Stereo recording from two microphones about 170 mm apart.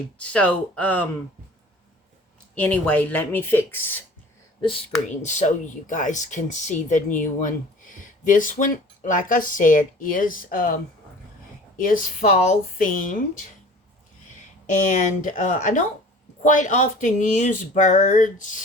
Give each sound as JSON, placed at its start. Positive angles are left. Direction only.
{"t": 0.2, "sound": "speech", "side_deg": 10}
{"t": 2.6, "sound": "speech", "side_deg": 10}
{"t": 5.0, "sound": "speech", "side_deg": 45}
{"t": 11.8, "sound": "speech", "side_deg": 50}
{"t": 14.7, "sound": "speech", "side_deg": 50}